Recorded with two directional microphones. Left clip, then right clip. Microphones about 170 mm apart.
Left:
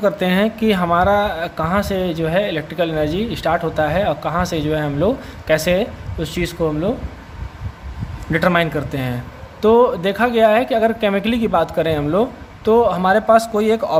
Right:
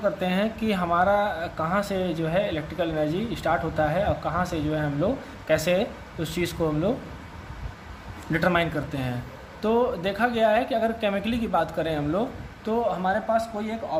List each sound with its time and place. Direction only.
0.0 s speech: 25° left (ahead or behind)
8.3 s speech: 25° left (ahead or behind); by 14.0 s 50° left (ahead or behind)